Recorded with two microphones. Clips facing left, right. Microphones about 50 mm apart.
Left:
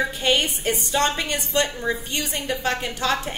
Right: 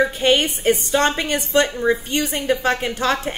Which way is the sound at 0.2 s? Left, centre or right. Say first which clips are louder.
Right 4 dB; right.